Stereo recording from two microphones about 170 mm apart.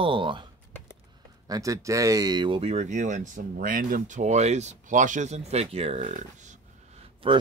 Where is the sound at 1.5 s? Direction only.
20° right (ahead or behind); by 6.5 s 45° right (ahead or behind).